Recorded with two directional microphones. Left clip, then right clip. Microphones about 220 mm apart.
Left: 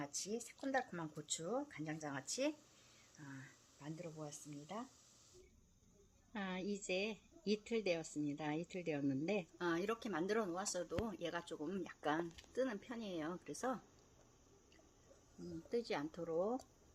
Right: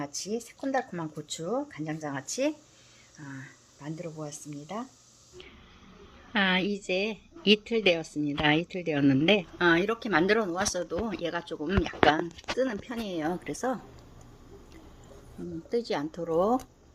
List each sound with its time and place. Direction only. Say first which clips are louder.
0.0 s speech: right 11 dB; 30° left (ahead or behind)
3.2 s speech: right 12 dB; centre (ahead or behind)
4.2 s speech: right 12 dB; 15° right (ahead or behind)
6.3 s a woman's voice: right 19 dB; 10° left (ahead or behind)
8.2 s speech: right 17 dB; 5° left (ahead or behind)
15.7 s speech: right 12 dB; 10° left (ahead or behind)